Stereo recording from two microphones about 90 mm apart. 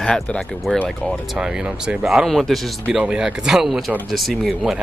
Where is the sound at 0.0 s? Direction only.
10° left (ahead or behind).